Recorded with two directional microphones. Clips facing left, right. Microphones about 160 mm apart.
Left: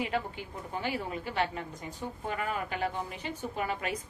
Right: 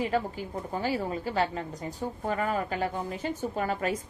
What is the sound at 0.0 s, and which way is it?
A woman's voice, 35° right (ahead or behind).